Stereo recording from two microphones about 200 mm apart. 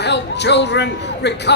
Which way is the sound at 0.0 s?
60° left (ahead or behind).